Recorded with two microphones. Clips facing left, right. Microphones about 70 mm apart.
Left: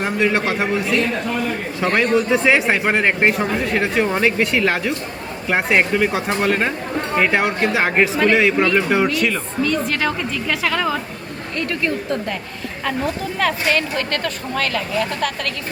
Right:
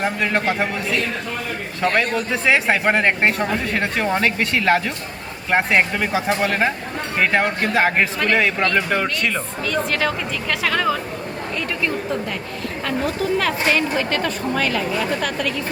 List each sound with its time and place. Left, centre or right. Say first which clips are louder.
0.0 s speech: left 2 dB; centre
1.8 s speech: left 3 dB; centre
12.8 s speech: even; centre